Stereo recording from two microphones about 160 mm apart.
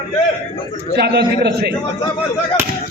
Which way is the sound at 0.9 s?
90° right.